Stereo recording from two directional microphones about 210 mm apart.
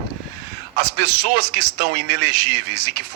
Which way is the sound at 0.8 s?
50° right (ahead or behind).